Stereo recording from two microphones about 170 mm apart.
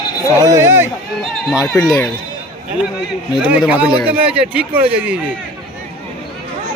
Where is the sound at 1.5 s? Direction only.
Centre (ahead or behind).